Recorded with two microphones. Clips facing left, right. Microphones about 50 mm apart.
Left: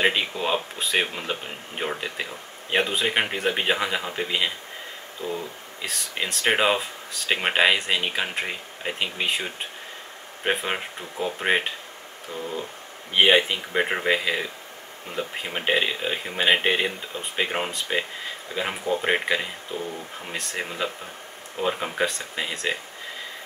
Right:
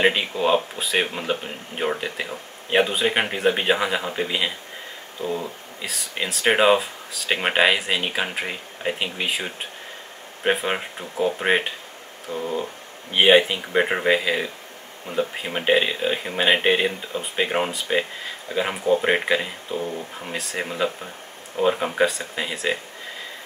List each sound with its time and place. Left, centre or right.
0.0 s speech: centre
5.2 s speech: right
5.8 s speech: centre
12.3 s speech: centre
13.1 s speech: centre